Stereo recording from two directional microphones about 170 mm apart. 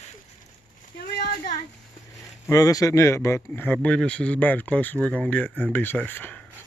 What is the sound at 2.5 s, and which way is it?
Speech, 20° left (ahead or behind).